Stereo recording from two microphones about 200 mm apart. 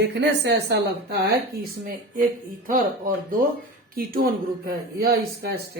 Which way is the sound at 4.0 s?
45° right (ahead or behind).